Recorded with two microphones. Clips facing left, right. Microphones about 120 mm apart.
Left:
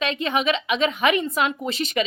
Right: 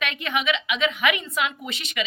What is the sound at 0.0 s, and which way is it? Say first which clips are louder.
Speech: left 4 dB; 30° left (ahead or behind).